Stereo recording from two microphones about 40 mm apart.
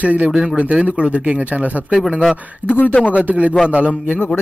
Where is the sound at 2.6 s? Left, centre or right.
Left.